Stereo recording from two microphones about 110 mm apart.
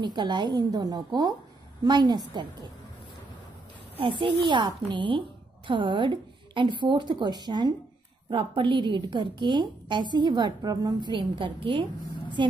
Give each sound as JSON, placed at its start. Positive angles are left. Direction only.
{"t": 0.0, "sound": "a woman's voice", "side_deg": -40}
{"t": 4.0, "sound": "a woman's voice", "side_deg": -50}
{"t": 8.3, "sound": "a woman's voice", "side_deg": -50}